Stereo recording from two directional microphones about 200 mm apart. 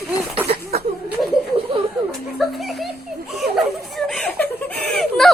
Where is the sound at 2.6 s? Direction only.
Centre (ahead or behind).